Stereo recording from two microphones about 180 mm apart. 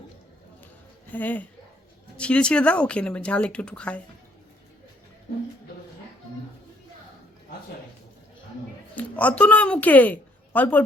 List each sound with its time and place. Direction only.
1.1 s speech: 10° left (ahead or behind)
9.0 s a woman's voice: 10° left (ahead or behind)